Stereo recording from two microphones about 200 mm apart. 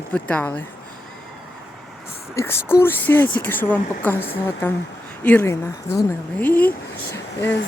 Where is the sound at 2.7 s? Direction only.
10° left (ahead or behind).